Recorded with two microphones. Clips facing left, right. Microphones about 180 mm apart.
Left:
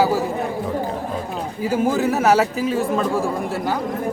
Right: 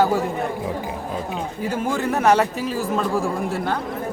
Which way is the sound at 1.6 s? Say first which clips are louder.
Left 5 dB; 5° left (ahead or behind).